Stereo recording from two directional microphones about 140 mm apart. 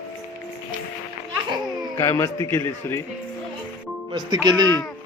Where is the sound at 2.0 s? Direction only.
20° left (ahead or behind).